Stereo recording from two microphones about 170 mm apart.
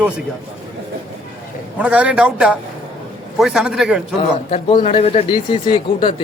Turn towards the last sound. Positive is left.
turn(degrees=30)  # may be behind; listen again after turning